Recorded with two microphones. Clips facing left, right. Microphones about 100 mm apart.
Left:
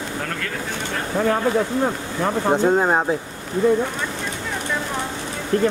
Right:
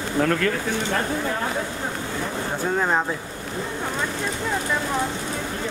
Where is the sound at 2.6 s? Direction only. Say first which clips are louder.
Left 2 dB; 25° left (ahead or behind).